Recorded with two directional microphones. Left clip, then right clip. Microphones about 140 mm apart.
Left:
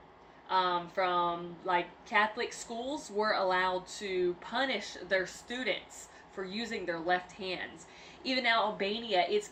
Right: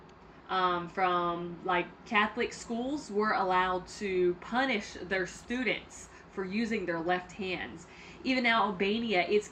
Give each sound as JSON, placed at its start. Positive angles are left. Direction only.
{"t": 0.4, "sound": "a woman's voice", "side_deg": 30}